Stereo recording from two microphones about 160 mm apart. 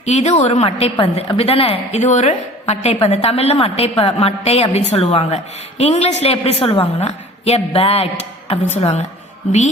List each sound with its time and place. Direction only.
0.0 s a woman's voice: 45° left (ahead or behind)